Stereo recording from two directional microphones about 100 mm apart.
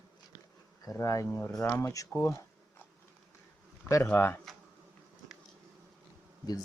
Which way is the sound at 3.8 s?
30° left (ahead or behind).